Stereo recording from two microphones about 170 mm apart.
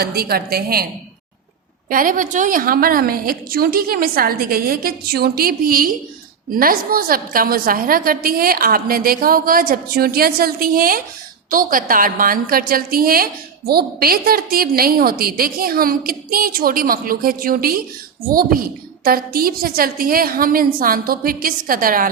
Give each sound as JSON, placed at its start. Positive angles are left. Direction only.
{"t": 0.0, "sound": "a woman's voice", "side_deg": -65}
{"t": 1.9, "sound": "a woman's voice", "side_deg": -50}